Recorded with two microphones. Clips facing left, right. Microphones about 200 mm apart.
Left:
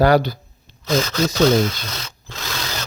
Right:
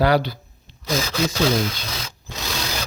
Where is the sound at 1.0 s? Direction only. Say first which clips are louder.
Left 4 dB; 5° right (ahead or behind).